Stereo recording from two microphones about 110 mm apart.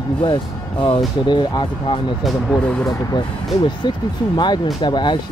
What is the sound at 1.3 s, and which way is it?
Speech, 45° left (ahead or behind).